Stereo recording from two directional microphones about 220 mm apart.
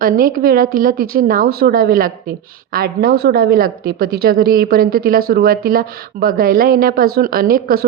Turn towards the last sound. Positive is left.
turn(degrees=-40)  # may be behind; listen again after turning